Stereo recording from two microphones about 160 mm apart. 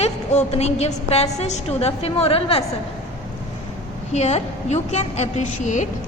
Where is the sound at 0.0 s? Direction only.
40° left (ahead or behind).